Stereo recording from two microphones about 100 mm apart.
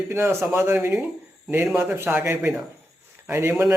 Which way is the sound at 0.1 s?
25° right (ahead or behind).